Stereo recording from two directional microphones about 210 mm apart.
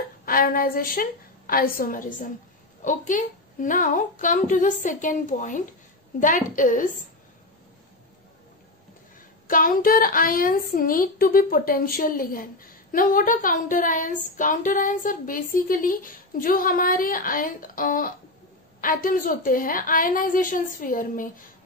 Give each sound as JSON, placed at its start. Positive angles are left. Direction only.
{"t": 0.2, "sound": "a woman's voice", "side_deg": 45}
{"t": 9.5, "sound": "a woman's voice", "side_deg": 40}